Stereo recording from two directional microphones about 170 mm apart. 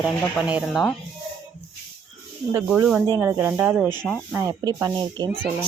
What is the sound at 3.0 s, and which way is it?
Speech, 15° right (ahead or behind).